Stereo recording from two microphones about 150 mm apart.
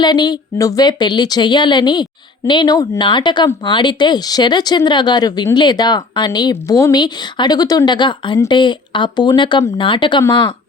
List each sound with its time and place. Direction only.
0.0 s speech: 30° left (ahead or behind)